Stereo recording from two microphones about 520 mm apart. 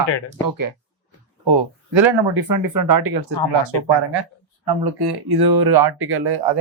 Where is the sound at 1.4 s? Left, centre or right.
Right.